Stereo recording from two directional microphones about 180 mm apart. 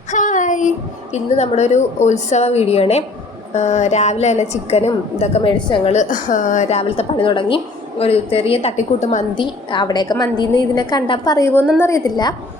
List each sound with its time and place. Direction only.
0.1 s child singing: 45° left (ahead or behind)
1.1 s a woman's voice: 40° left (ahead or behind)
9.3 s a woman's voice: 25° left (ahead or behind)